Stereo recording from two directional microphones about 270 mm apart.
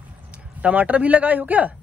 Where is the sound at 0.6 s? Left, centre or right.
Centre.